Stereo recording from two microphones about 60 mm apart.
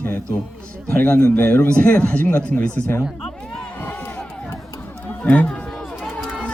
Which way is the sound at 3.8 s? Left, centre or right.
Left.